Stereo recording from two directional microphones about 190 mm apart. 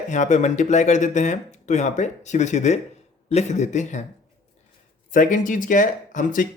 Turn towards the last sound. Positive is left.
turn(degrees=45)  # may be behind; listen again after turning